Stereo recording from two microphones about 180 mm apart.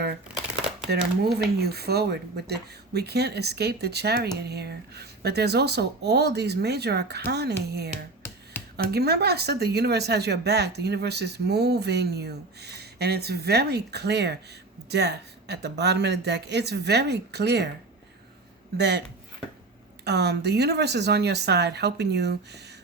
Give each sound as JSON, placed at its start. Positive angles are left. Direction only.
{"t": 0.9, "sound": "speech", "side_deg": -65}
{"t": 18.8, "sound": "speech", "side_deg": -70}
{"t": 20.1, "sound": "speech", "side_deg": -65}